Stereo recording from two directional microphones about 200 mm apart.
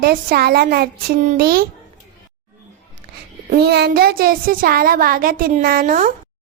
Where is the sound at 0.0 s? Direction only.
50° right (ahead or behind).